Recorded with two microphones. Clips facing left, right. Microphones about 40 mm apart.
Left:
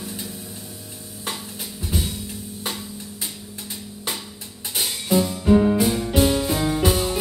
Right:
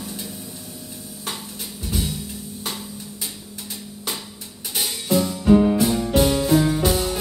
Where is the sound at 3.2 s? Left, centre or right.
Centre.